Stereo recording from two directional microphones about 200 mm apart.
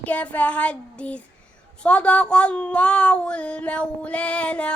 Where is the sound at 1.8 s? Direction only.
5° left (ahead or behind).